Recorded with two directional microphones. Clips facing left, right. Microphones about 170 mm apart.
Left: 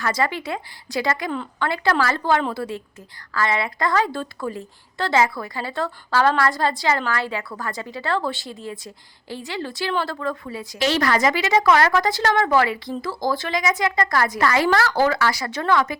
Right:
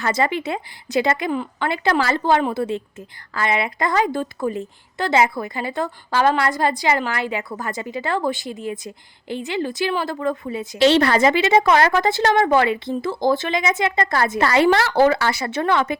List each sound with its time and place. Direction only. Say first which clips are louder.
0.0 s a woman's voice: right 3 dB; 20° right (ahead or behind)
1.3 s a woman's voice: right 2 dB; 10° right (ahead or behind)